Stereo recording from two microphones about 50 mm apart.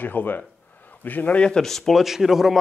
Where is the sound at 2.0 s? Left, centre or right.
Centre.